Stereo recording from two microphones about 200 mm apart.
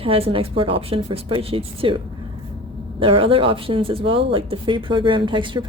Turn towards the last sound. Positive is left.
turn(degrees=-25)  # may be behind; listen again after turning